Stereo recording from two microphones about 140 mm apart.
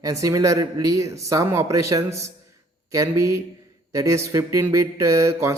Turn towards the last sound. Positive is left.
turn(degrees=-20)  # may be behind; listen again after turning